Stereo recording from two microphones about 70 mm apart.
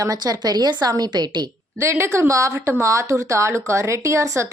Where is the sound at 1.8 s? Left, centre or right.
Right.